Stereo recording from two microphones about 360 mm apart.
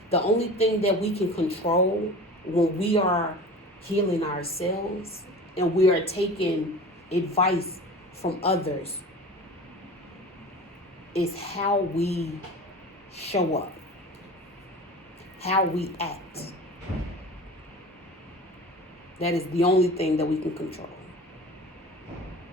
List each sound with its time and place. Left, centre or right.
0.1 s speech: centre
11.1 s speech: centre
15.4 s speech: centre
19.2 s speech: centre